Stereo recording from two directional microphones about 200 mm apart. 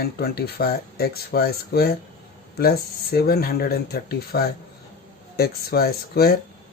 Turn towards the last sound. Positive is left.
turn(degrees=50)  # may be behind; listen again after turning